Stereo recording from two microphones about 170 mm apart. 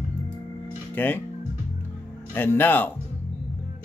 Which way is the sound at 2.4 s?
10° left (ahead or behind).